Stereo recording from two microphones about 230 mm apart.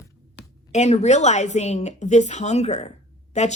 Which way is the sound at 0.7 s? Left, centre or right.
Left.